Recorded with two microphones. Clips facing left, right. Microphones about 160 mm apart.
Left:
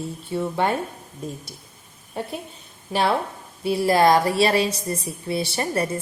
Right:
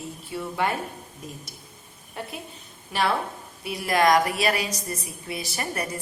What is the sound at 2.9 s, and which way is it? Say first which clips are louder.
A woman's voice: left 3 dB; 30° left (ahead or behind).